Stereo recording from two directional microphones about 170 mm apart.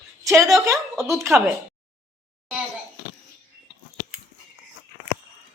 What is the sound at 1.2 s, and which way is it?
Speech, 15° right (ahead or behind).